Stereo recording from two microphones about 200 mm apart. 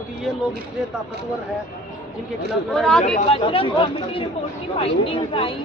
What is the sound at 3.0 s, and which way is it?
Speech, 30° left (ahead or behind).